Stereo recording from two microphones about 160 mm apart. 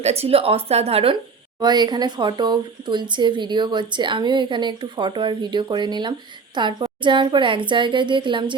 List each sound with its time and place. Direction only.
0.0 s speech: 40° right (ahead or behind)
1.6 s speech: 25° right (ahead or behind)